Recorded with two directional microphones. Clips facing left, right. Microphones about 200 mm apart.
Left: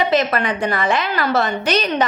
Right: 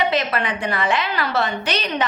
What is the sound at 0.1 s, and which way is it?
A woman's voice, 45° left (ahead or behind).